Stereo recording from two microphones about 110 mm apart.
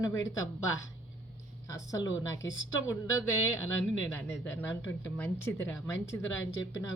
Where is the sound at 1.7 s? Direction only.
30° left (ahead or behind).